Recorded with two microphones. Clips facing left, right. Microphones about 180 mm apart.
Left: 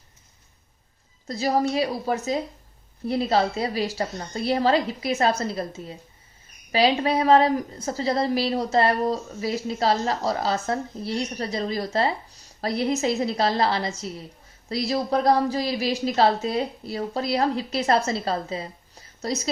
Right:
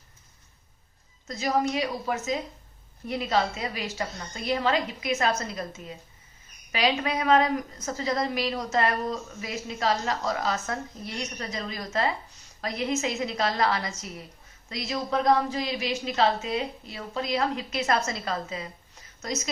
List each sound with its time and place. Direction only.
1.3 s a woman's voice: 35° left (ahead or behind)